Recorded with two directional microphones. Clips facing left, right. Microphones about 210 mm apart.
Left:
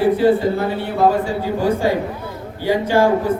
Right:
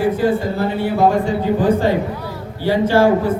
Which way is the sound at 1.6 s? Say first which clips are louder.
Even; 10° left (ahead or behind).